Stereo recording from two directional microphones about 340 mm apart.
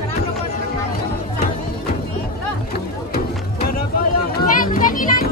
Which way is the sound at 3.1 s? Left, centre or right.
Left.